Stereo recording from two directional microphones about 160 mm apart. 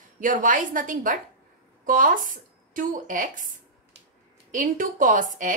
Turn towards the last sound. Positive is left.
turn(degrees=-55)  # may be behind; listen again after turning